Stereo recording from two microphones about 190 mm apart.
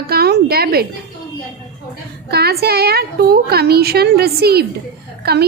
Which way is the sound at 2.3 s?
55° right (ahead or behind).